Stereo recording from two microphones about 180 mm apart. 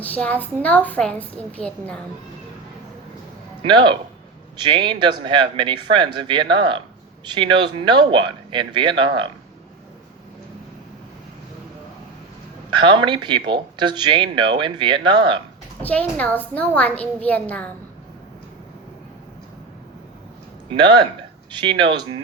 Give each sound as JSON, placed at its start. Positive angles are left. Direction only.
{"t": 0.0, "sound": "a child's voice", "side_deg": 10}
{"t": 3.6, "sound": "speech", "side_deg": -25}
{"t": 12.7, "sound": "speech", "side_deg": -25}
{"t": 15.8, "sound": "a child's voice", "side_deg": 10}
{"t": 20.7, "sound": "speech", "side_deg": -25}